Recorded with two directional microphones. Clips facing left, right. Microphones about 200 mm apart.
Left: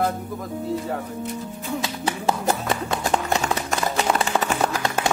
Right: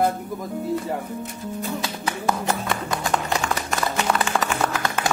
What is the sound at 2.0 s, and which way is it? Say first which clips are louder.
Speech: left 1 dB; 25° left (ahead or behind).